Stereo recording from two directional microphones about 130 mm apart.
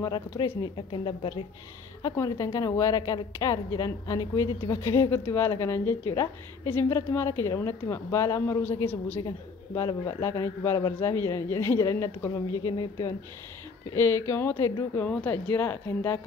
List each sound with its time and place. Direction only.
0.0 s speech: 35° left (ahead or behind)
2.0 s a woman's voice: 30° left (ahead or behind)
13.9 s a woman's voice: 20° left (ahead or behind)